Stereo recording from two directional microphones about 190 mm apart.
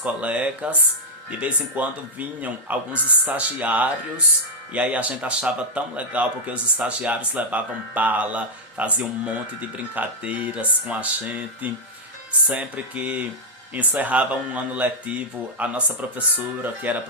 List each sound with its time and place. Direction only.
0.0 s a man's voice: 5° right (ahead or behind)